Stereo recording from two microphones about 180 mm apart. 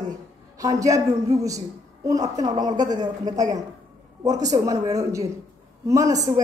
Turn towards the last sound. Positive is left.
turn(degrees=-20)  # may be behind; listen again after turning